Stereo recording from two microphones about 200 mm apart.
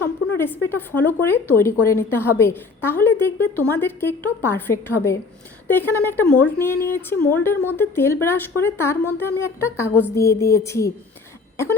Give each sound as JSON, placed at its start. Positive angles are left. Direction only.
{"t": 0.3, "sound": "speech", "side_deg": 10}